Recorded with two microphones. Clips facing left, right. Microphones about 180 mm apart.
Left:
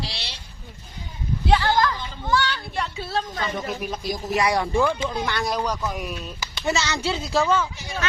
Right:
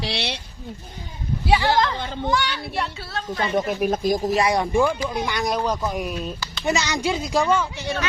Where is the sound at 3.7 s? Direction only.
50° right (ahead or behind).